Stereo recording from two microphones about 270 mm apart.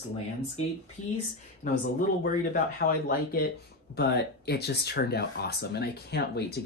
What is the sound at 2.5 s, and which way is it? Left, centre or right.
Speech, left.